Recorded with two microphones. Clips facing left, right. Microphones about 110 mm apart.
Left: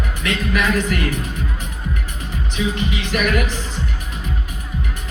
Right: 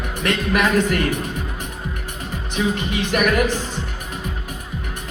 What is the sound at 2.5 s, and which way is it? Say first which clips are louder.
Speech: right 1 dB; 55° right (ahead or behind).